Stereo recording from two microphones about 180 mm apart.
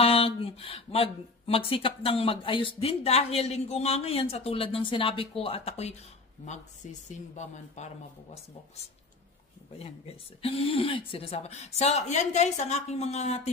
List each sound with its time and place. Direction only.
0.0 s speech: 30° left (ahead or behind)
10.4 s speech: 30° left (ahead or behind)